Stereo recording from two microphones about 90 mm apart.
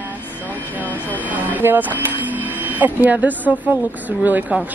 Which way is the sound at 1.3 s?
20° right (ahead or behind).